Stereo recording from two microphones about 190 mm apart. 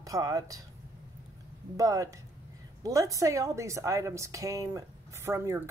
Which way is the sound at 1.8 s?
15° right (ahead or behind).